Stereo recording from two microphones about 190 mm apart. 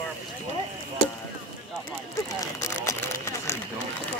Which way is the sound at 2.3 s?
15° left (ahead or behind).